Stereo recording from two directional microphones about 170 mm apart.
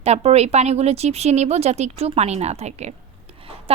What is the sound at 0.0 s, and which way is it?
A woman's voice, 40° right (ahead or behind).